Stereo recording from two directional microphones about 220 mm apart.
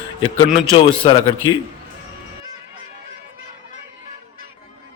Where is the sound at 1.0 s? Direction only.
20° left (ahead or behind).